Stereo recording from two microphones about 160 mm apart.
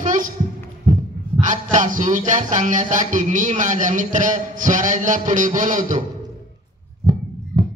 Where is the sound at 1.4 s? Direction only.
50° right (ahead or behind).